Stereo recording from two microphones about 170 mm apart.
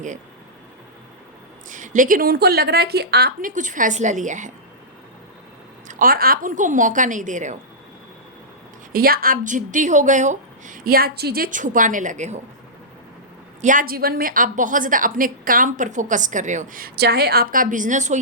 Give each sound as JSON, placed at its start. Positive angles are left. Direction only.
{"t": 1.7, "sound": "a woman's voice", "side_deg": -50}
{"t": 3.5, "sound": "a woman's voice", "side_deg": -50}
{"t": 5.9, "sound": "a woman's voice", "side_deg": -55}
{"t": 8.9, "sound": "a woman's voice", "side_deg": -60}
{"t": 13.6, "sound": "a woman's voice", "side_deg": -50}